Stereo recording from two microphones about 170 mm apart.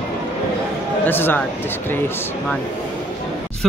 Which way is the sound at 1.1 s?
10° left (ahead or behind).